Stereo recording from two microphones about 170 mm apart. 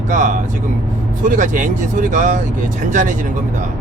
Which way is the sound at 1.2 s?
50° right (ahead or behind).